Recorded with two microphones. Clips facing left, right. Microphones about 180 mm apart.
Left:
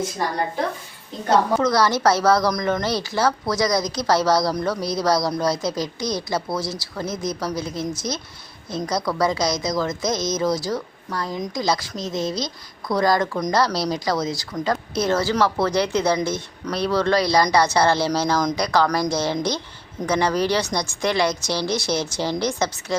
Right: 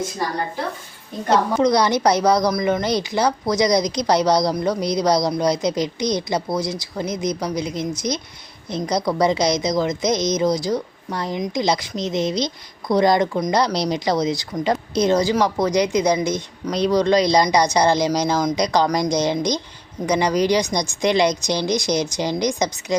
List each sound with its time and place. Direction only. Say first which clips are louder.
1.3 s a woman's voice: right 2 dB; 20° right (ahead or behind)